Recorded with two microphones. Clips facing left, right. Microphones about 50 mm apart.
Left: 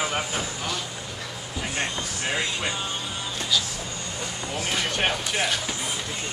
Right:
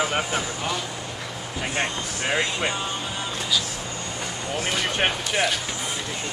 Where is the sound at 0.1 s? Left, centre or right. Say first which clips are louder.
Right 3 dB; right.